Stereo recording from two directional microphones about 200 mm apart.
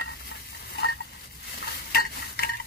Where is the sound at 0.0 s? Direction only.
55° left (ahead or behind).